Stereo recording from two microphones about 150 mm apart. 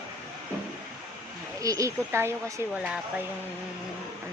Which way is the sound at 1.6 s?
20° right (ahead or behind).